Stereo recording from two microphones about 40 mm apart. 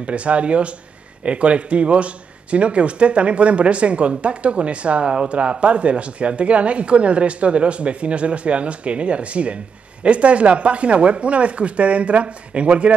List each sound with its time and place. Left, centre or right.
0.0 s speech: right